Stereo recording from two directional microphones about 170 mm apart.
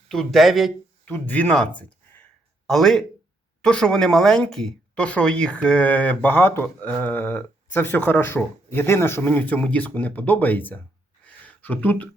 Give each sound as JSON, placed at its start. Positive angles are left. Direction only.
{"t": 0.1, "sound": "speech", "side_deg": 0}